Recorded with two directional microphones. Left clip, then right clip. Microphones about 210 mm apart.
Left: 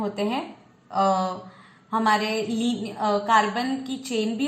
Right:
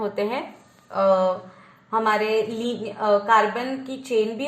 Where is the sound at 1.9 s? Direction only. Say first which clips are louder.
Right 1 dB; 30° right (ahead or behind).